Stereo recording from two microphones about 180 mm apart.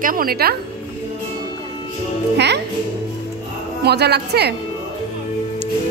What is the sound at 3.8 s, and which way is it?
Speech, 65° right (ahead or behind).